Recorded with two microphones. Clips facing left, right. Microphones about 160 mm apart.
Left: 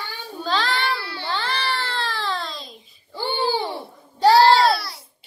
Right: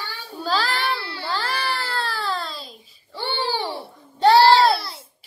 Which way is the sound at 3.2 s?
10° left (ahead or behind).